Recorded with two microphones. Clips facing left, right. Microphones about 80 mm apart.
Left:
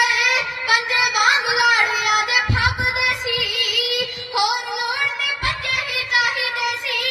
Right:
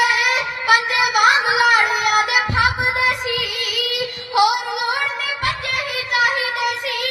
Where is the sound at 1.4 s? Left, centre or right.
Right.